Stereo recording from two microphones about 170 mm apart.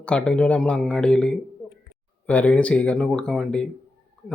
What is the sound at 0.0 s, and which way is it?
Speech, 5° left (ahead or behind).